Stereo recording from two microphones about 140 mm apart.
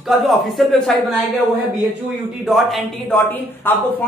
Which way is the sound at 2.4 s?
Centre (ahead or behind).